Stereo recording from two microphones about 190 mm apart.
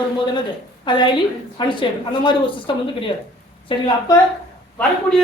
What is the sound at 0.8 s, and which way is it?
A woman's voice, 25° left (ahead or behind).